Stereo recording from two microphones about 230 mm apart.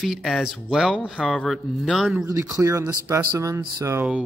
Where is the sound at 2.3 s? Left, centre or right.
Centre.